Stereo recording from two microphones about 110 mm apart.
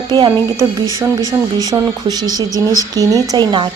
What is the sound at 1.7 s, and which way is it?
A woman's voice, 35° right (ahead or behind).